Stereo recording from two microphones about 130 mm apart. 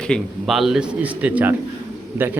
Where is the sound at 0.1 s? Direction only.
Centre (ahead or behind).